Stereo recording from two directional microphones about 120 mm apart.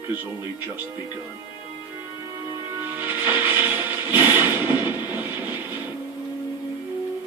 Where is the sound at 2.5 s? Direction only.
15° right (ahead or behind).